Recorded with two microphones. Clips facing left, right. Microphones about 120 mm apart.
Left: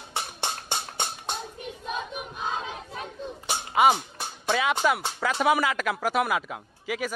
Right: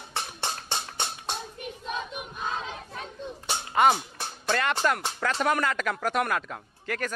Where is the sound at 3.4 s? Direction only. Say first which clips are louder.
Left 1 dB; 5° left (ahead or behind).